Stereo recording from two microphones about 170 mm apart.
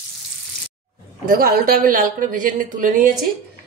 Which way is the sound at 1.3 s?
60° right (ahead or behind).